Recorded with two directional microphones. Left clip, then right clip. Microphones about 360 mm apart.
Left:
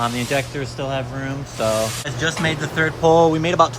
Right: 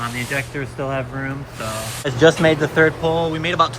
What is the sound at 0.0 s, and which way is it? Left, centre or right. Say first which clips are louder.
Speech: left 3 dB; centre.